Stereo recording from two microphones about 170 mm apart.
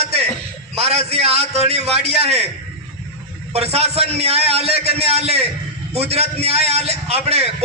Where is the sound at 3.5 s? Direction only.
35° right (ahead or behind).